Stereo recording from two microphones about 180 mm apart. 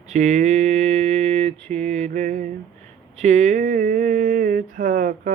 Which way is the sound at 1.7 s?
40° right (ahead or behind).